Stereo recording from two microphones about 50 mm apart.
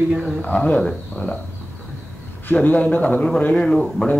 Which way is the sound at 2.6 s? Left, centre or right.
Left.